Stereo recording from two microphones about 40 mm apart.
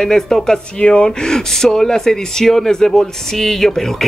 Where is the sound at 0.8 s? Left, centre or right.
Left.